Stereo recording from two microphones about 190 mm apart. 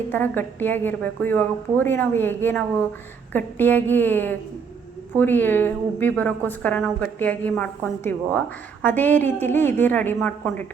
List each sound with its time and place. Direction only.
0.1 s a woman's voice: 10° left (ahead or behind)